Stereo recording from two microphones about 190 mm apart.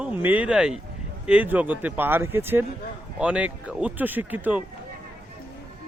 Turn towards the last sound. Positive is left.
turn(degrees=-10)  # may be behind; listen again after turning